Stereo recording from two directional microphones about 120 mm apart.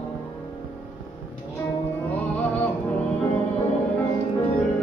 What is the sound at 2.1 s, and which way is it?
Music, 15° left (ahead or behind).